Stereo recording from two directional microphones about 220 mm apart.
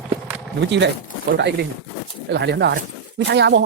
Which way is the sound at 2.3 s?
50° right (ahead or behind).